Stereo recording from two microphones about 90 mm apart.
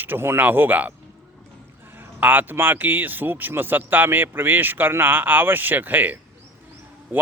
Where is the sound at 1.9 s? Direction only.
20° right (ahead or behind).